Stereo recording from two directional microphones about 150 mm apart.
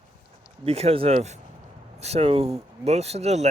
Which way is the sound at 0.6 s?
40° right (ahead or behind).